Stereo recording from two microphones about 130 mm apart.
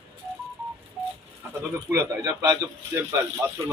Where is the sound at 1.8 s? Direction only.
25° right (ahead or behind).